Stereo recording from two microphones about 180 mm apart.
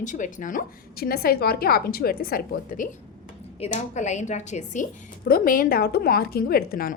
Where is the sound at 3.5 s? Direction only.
40° left (ahead or behind).